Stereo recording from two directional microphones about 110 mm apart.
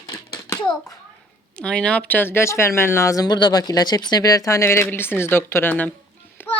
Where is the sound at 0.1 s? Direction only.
35° left (ahead or behind).